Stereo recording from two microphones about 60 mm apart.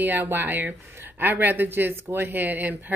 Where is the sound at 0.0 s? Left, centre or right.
Right.